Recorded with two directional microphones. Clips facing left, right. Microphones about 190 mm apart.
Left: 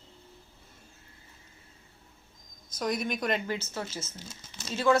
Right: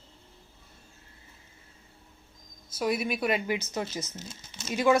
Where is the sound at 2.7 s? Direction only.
5° right (ahead or behind).